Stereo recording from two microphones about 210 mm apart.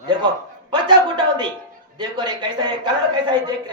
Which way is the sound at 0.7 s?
20° right (ahead or behind).